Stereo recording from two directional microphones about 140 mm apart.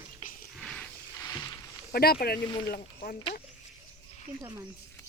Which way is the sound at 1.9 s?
90° left.